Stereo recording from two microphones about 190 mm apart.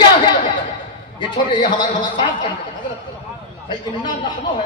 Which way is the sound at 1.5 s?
25° left (ahead or behind).